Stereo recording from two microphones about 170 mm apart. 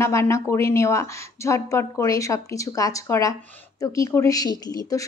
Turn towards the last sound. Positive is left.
turn(degrees=20)  # may be behind; listen again after turning